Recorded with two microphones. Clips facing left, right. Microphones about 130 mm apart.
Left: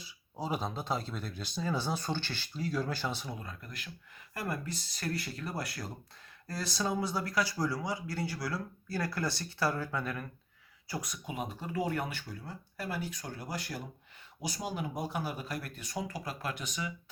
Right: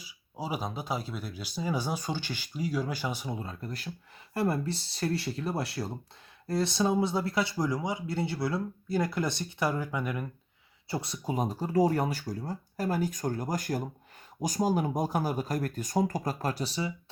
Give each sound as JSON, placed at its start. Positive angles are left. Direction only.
{"t": 0.0, "sound": "speech", "side_deg": -10}
{"t": 3.3, "sound": "speech", "side_deg": -30}
{"t": 10.8, "sound": "speech", "side_deg": -25}